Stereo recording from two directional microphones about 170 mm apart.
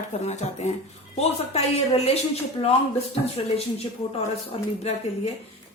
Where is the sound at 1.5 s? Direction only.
35° left (ahead or behind).